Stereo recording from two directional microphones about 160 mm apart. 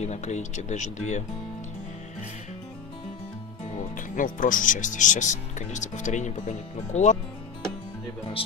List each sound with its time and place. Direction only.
0.0 s speech: 45° left (ahead or behind)
3.9 s speech: 55° left (ahead or behind)